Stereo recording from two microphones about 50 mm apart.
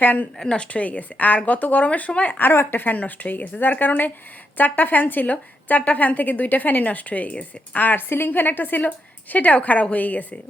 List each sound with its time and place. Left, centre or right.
0.0 s a woman's voice: left
0.3 s speech: centre
2.4 s a woman's voice: left